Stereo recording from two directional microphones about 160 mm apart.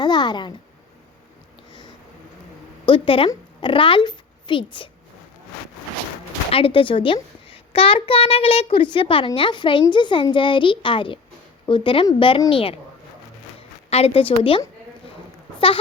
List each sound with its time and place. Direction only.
0.0 s a sound: 30° left (ahead or behind)
2.8 s a woman's voice: 35° left (ahead or behind)
6.5 s a child's voice: 35° left (ahead or behind)